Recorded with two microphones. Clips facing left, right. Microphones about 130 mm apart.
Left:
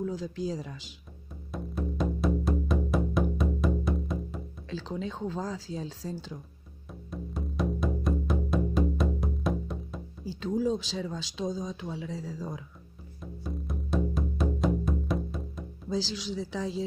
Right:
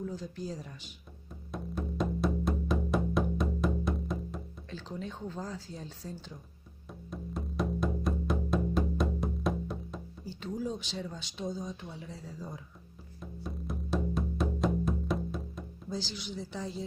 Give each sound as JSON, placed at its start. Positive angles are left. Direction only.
{"t": 0.0, "sound": "speech", "side_deg": 90}
{"t": 1.5, "sound": "music", "side_deg": 0}
{"t": 4.6, "sound": "speech", "side_deg": 90}
{"t": 6.9, "sound": "music", "side_deg": 0}
{"t": 10.2, "sound": "speech", "side_deg": 90}
{"t": 13.2, "sound": "music", "side_deg": 0}
{"t": 15.9, "sound": "speech", "side_deg": 90}